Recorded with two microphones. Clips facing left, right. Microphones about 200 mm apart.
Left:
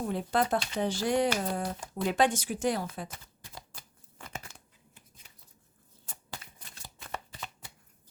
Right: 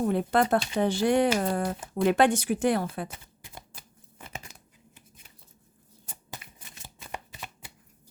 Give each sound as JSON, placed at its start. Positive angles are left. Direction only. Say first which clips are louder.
{"t": 0.0, "sound": "speech", "louder": "right 5 dB", "side_deg": -60}
{"t": 4.2, "sound": "a sound", "louder": "right 1 dB", "side_deg": -20}
{"t": 6.3, "sound": "shuffling cards", "louder": "right 1 dB", "side_deg": -15}